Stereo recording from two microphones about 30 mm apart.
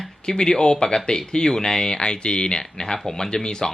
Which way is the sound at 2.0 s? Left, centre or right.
Left.